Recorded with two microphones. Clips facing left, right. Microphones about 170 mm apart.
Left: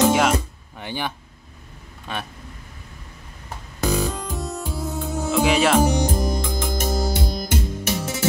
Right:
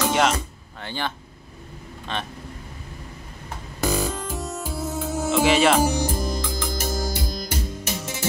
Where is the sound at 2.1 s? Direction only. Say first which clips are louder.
Right 1 dB; 10° left (ahead or behind).